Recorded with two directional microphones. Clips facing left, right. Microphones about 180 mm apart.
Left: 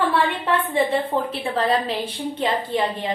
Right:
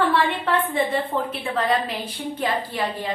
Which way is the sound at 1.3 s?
30° left (ahead or behind).